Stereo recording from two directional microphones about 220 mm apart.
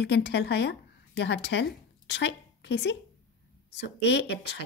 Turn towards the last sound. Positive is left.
turn(degrees=50)  # may be behind; listen again after turning